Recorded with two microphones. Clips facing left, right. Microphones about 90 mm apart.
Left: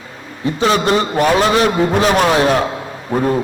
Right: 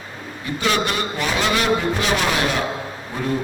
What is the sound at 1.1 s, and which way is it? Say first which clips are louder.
A man's voice: left 8 dB; 50° left (ahead or behind).